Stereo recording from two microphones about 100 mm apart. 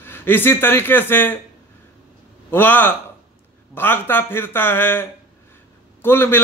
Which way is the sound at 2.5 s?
20° left (ahead or behind).